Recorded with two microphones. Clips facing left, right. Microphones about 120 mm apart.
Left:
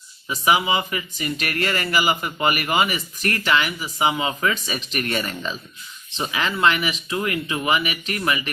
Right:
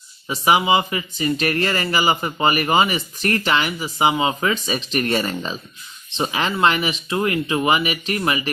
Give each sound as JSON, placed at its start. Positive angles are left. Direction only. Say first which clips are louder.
{"t": 0.3, "sound": "speech", "louder": "right 3 dB", "side_deg": -30}